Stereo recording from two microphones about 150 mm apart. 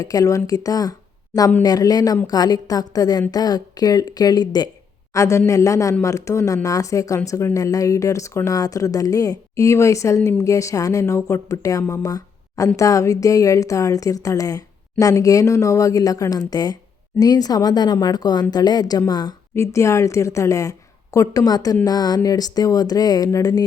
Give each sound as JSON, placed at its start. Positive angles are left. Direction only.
{"t": 0.0, "sound": "speech", "side_deg": 25}